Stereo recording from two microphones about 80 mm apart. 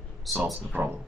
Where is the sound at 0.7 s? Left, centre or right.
Right.